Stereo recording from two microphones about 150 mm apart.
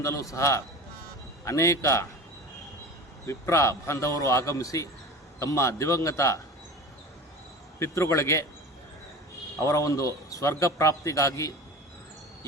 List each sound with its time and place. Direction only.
0.0 s a man's voice: 20° left (ahead or behind)
3.2 s a man's voice: 20° left (ahead or behind)
7.8 s a man's voice: 20° left (ahead or behind)
9.6 s a man's voice: 20° left (ahead or behind)